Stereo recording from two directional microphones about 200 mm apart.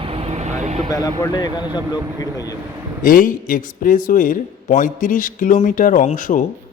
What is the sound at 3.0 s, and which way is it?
A man's voice, 45° left (ahead or behind).